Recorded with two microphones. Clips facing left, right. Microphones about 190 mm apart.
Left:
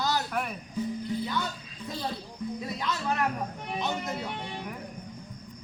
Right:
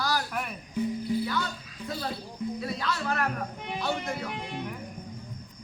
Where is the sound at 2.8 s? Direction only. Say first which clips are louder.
Left 1 dB; 20° left (ahead or behind).